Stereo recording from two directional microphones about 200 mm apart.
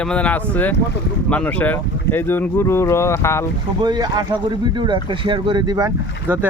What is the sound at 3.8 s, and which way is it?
Speech, 20° right (ahead or behind).